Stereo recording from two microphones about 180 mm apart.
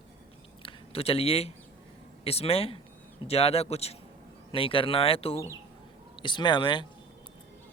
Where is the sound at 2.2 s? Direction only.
35° left (ahead or behind).